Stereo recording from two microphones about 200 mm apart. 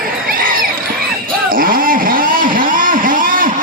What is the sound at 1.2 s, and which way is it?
Vehicle, 45° right (ahead or behind).